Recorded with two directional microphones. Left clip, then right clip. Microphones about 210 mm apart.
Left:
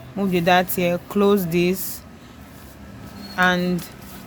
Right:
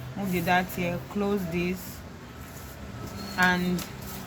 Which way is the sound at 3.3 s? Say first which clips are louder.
Left 5 dB; 55° left (ahead or behind).